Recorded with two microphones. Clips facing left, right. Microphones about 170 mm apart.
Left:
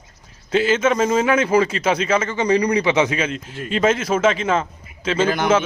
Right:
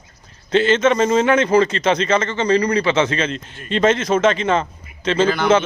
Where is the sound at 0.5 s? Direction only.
5° left (ahead or behind).